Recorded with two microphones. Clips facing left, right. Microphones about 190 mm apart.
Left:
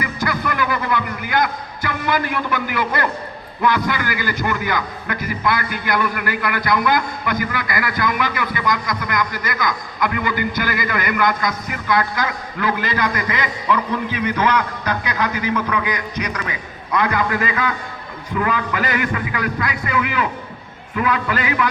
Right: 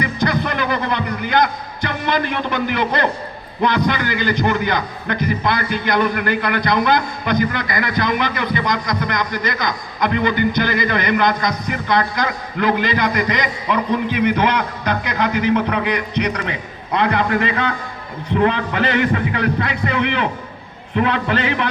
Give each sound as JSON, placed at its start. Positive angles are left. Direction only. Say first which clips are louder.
{"t": 0.0, "sound": "a sound", "louder": "right 3 dB", "side_deg": -20}
{"t": 3.6, "sound": "a man's voice", "louder": "right 2 dB", "side_deg": -20}
{"t": 15.2, "sound": "a man's voice", "louder": "right 6 dB", "side_deg": -30}